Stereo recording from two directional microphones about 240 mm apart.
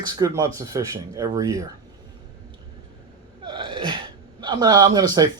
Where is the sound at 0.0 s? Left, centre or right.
Centre.